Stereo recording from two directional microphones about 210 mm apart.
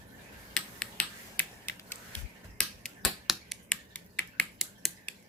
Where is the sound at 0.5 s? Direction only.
5° left (ahead or behind).